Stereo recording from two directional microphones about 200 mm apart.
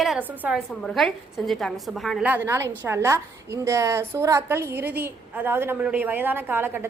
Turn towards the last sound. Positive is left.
turn(degrees=-10)  # may be behind; listen again after turning